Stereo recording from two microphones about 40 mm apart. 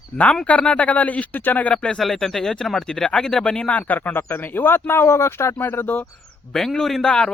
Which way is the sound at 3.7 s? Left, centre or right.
Left.